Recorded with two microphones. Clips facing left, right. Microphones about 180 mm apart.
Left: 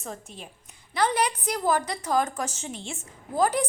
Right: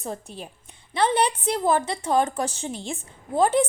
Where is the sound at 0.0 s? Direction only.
35° right (ahead or behind).